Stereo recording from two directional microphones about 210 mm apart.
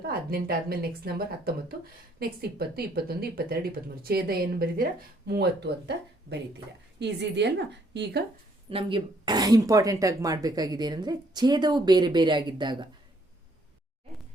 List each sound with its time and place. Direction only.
0.1 s speech: 45° right (ahead or behind)
2.1 s a woman's voice: 45° right (ahead or behind)
8.7 s speech: 25° right (ahead or behind)